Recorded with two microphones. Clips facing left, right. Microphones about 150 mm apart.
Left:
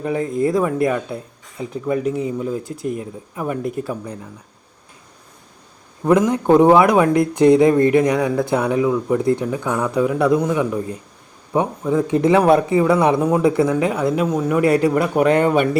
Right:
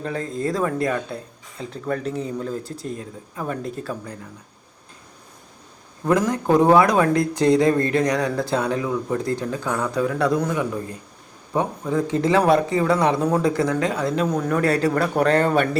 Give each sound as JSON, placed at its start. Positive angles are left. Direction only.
{"t": 0.0, "sound": "speech", "side_deg": 15}
{"t": 6.1, "sound": "speech", "side_deg": 20}